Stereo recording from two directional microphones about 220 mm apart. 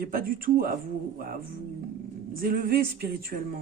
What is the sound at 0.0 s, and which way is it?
Speech, 40° right (ahead or behind).